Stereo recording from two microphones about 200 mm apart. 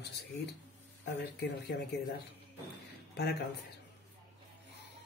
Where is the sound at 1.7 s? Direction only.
60° left (ahead or behind).